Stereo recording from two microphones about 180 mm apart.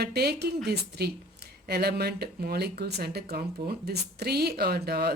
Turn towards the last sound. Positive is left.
turn(degrees=-60)  # may be behind; listen again after turning